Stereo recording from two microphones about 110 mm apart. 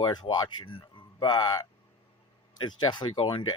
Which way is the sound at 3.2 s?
55° left (ahead or behind).